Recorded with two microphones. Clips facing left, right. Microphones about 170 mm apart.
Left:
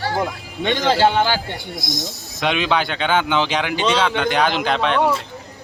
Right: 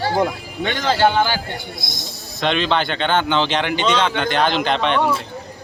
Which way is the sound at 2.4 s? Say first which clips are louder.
Right 1 dB; 10° left (ahead or behind).